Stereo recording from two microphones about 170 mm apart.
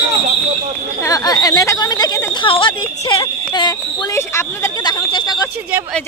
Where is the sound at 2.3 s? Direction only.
30° left (ahead or behind).